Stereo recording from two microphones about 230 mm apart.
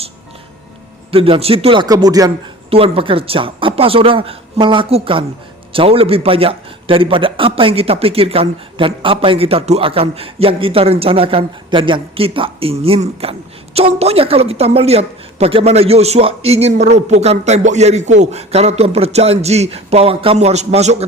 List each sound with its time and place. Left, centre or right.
1.1 s a man's voice: right